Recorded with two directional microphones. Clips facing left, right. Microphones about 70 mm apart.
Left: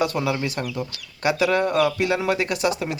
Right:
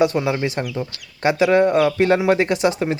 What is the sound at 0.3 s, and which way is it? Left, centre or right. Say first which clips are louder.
Speech: right 3 dB; right.